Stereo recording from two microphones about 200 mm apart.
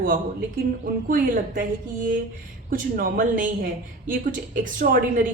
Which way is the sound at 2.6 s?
45° right (ahead or behind).